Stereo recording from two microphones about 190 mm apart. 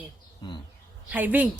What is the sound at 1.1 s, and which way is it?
Speech, 10° right (ahead or behind).